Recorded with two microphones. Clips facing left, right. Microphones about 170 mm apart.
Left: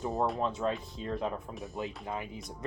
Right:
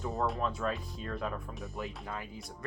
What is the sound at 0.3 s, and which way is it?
Speech, 25° left (ahead or behind).